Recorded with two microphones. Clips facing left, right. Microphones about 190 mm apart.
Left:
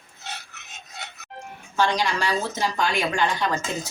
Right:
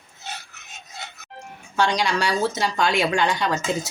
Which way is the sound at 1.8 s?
75° right (ahead or behind).